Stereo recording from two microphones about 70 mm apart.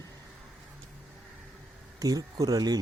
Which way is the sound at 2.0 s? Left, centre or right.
Right.